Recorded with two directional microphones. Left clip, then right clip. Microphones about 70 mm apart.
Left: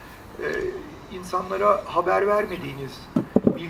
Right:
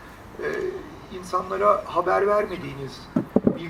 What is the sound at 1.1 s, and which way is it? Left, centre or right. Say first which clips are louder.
Speech: even; left.